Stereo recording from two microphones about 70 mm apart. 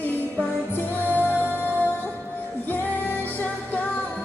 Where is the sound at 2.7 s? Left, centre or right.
Left.